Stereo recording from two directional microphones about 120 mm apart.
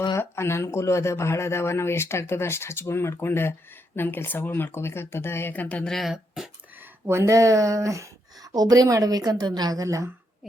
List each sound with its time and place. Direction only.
0.2 s speech: 20° left (ahead or behind); by 6.5 s centre (ahead or behind)
7.1 s a woman's voice: 25° right (ahead or behind)